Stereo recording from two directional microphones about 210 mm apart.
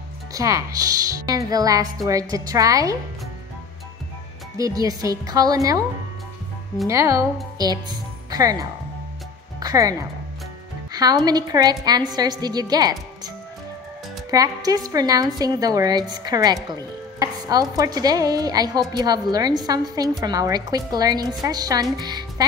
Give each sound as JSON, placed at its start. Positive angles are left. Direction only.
{"t": 0.3, "sound": "speech", "side_deg": -15}
{"t": 4.6, "sound": "speech", "side_deg": -15}
{"t": 6.9, "sound": "a woman's voice", "side_deg": -15}
{"t": 14.3, "sound": "a woman's voice", "side_deg": -15}